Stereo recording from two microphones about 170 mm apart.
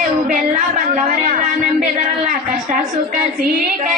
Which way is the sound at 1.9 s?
50° right (ahead or behind).